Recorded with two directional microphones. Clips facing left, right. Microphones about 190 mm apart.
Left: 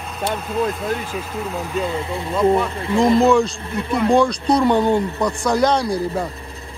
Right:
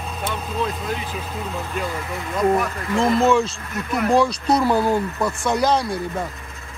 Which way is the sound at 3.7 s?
30° left (ahead or behind).